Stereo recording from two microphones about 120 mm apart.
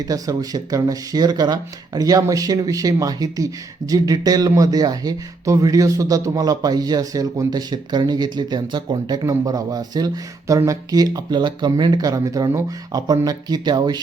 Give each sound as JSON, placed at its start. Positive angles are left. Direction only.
{"t": 0.0, "sound": "speech", "side_deg": -30}